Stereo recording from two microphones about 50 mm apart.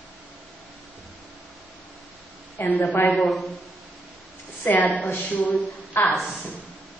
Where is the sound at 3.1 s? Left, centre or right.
Centre.